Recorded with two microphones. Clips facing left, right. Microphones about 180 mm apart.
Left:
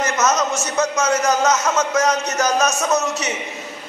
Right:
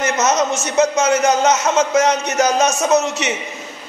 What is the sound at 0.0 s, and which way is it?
A man's voice, 25° right (ahead or behind).